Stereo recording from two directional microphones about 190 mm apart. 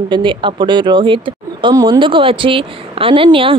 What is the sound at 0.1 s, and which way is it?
Speech, 25° right (ahead or behind).